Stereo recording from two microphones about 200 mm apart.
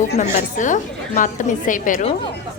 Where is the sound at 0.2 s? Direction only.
40° left (ahead or behind).